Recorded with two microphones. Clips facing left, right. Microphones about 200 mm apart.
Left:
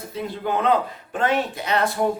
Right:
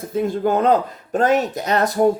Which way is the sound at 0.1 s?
45° right (ahead or behind).